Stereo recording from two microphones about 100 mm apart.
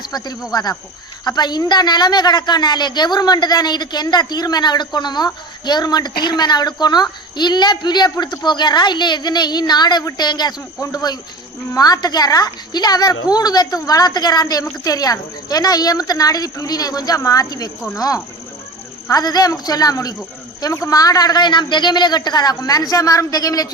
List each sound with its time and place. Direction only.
0.0 s a woman's voice: 45° left (ahead or behind)